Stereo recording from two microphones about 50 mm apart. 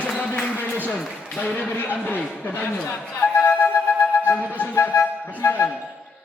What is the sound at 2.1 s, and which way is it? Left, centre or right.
Speech, left.